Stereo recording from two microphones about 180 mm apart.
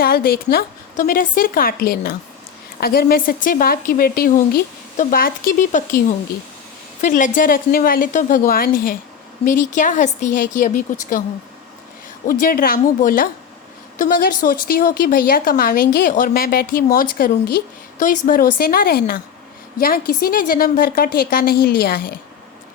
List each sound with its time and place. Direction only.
0.0 s a woman's voice: 55° left (ahead or behind)
12.3 s a woman's voice: 50° left (ahead or behind)